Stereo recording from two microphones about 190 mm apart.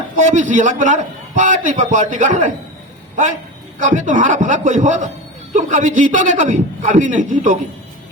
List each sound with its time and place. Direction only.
0.3 s a man's voice: 40° right (ahead or behind)
3.8 s a man's voice: 40° right (ahead or behind)